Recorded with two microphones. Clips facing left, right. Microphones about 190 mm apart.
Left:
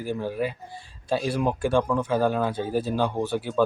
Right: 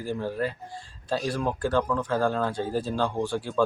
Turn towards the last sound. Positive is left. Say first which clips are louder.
# left 2 dB
turn(degrees=20)  # may be behind; listen again after turning